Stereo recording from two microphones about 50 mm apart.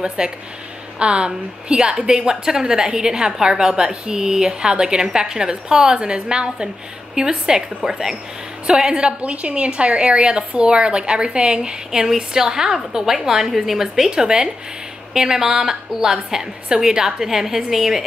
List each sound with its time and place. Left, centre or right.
0.2 s a woman's voice: centre